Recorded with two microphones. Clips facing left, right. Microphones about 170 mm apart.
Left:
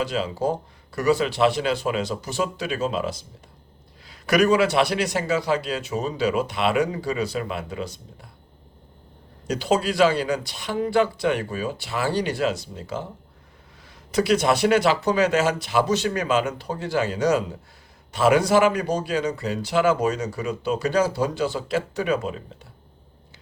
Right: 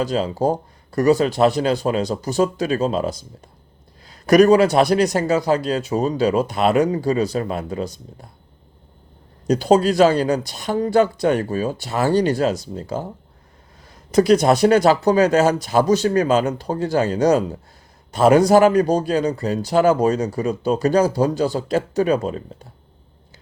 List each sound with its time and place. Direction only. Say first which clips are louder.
0.0 s speech: right 5 dB; 40° right (ahead or behind)
9.5 s speech: right 7 dB; 40° right (ahead or behind)
14.1 s speech: right 6 dB; 40° right (ahead or behind)